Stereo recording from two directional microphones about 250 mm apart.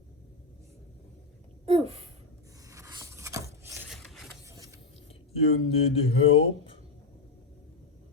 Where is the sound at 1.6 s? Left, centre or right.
Right.